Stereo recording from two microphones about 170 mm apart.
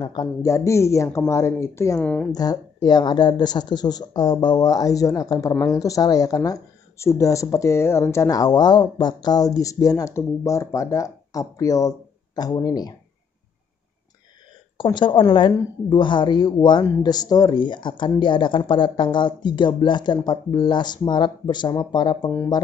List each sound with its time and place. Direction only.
0.0 s speech: 25° left (ahead or behind)
2.0 s speech: 5° left (ahead or behind)
2.3 s speech: 25° left (ahead or behind)
14.8 s speech: 30° left (ahead or behind)